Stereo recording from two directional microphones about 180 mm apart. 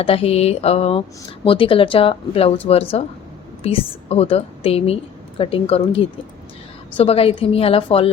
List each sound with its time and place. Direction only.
0.0 s a woman's voice: 30° left (ahead or behind)